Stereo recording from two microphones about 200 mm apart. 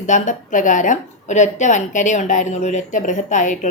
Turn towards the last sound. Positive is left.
turn(degrees=40)  # may be behind; listen again after turning